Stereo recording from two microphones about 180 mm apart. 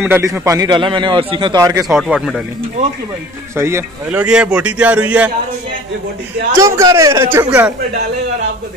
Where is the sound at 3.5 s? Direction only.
15° right (ahead or behind).